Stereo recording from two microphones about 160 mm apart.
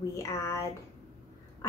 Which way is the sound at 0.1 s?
20° left (ahead or behind).